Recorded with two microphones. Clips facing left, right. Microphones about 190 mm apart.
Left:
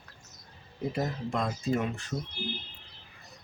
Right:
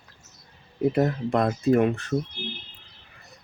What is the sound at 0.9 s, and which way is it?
Speech, 60° right (ahead or behind).